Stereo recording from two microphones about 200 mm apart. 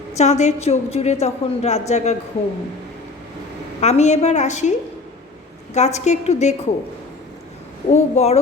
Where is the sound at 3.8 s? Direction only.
35° left (ahead or behind).